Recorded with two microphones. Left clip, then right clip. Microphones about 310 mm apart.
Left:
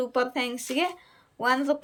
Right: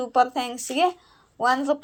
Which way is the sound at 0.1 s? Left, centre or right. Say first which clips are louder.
Right 5 dB; centre.